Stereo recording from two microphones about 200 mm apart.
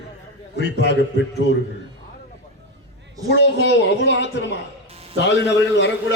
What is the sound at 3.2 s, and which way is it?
A man's voice, 60° left (ahead or behind).